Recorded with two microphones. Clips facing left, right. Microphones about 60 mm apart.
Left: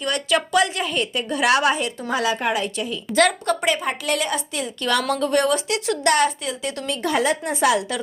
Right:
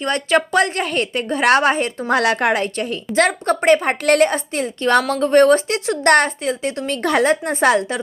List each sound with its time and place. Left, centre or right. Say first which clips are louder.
0.0 s a woman's voice: right 4 dB; right
1.3 s a woman's voice: right 4 dB; right
2.0 s a woman's voice: right 6 dB; right
3.2 s a woman's voice: right 2 dB; right
6.1 s a woman's voice: right 4 dB; right
6.4 s a woman's voice: right 5 dB; right
6.9 s a woman's voice: right 5 dB; right